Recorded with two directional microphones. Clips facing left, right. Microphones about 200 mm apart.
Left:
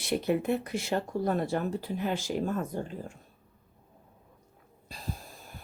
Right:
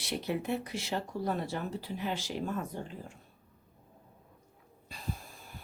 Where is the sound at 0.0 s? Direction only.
50° left (ahead or behind).